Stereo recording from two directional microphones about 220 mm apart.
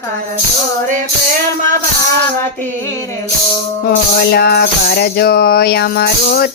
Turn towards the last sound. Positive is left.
turn(degrees=45)  # may be behind; listen again after turning